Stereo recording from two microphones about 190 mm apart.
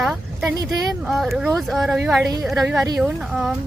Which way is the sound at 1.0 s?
Centre (ahead or behind).